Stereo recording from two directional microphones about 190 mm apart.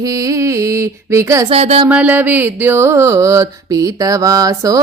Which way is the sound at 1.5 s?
35° right (ahead or behind).